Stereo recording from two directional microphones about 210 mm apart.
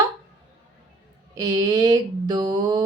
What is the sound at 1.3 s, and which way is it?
Mantra, 15° right (ahead or behind).